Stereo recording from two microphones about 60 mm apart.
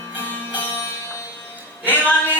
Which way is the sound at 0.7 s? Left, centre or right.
Left.